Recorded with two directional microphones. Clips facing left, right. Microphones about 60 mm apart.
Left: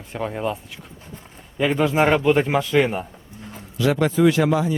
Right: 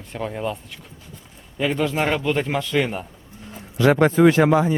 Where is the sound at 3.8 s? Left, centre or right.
Right.